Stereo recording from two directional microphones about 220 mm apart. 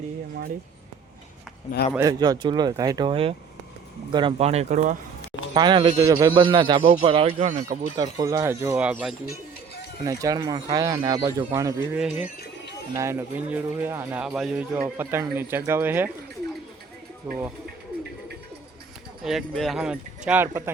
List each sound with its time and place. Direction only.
2.0 s a man's voice: 15° right (ahead or behind); by 4.9 s 35° right (ahead or behind)
5.5 s a man's voice: 20° right (ahead or behind)
7.9 s speech: 15° right (ahead or behind)
11.9 s speech: 5° right (ahead or behind)
17.2 s speech: 5° right (ahead or behind)
19.2 s speech: centre (ahead or behind)